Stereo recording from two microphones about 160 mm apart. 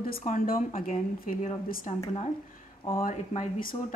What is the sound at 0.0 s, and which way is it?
Speech, 55° left (ahead or behind).